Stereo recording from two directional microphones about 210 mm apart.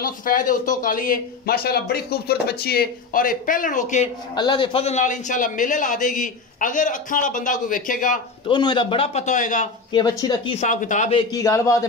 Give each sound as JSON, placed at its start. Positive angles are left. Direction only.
{"t": 0.0, "sound": "speech", "side_deg": 40}
{"t": 4.4, "sound": "speech", "side_deg": 25}
{"t": 8.5, "sound": "speech", "side_deg": 20}
{"t": 9.9, "sound": "speech", "side_deg": 20}
{"t": 11.3, "sound": "a man's voice", "side_deg": 15}